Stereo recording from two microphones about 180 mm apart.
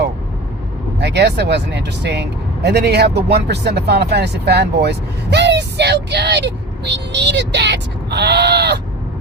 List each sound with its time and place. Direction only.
0.9 s speech: 70° right (ahead or behind)